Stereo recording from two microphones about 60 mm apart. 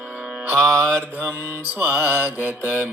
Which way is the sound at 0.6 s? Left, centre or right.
Right.